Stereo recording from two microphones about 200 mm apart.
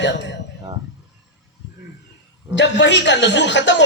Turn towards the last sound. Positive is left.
turn(degrees=65)  # may be behind; listen again after turning